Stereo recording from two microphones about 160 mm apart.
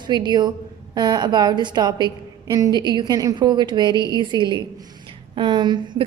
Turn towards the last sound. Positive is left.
turn(degrees=-30)  # may be behind; listen again after turning